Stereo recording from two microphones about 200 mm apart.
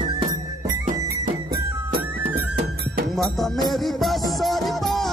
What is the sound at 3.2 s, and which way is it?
Music, centre (ahead or behind).